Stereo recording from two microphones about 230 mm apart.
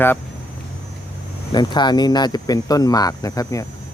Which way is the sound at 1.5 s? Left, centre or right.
Centre.